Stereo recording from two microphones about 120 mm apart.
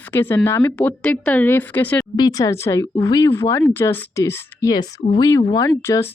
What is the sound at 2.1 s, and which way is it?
Speech, 35° left (ahead or behind).